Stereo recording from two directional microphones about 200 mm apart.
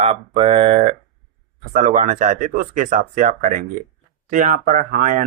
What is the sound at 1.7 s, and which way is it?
Speech, 40° right (ahead or behind).